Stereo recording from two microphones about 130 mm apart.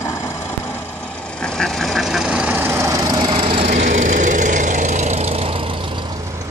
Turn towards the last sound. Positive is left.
turn(degrees=-50)  # may be behind; listen again after turning